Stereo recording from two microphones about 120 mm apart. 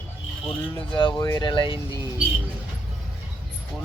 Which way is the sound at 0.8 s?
45° left (ahead or behind).